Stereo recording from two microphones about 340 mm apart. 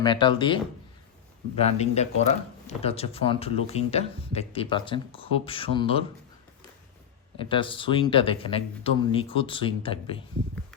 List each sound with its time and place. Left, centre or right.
0.0 s a man's voice: centre
7.3 s speech: centre